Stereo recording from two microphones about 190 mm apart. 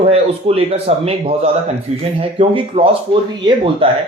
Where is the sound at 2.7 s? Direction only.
30° right (ahead or behind).